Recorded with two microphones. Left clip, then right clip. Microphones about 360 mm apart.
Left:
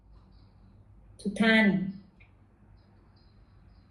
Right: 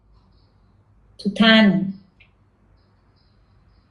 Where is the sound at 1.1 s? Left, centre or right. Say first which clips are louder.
Right 9 dB; right.